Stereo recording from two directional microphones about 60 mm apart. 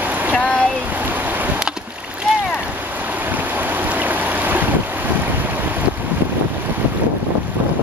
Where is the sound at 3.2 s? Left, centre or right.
Right.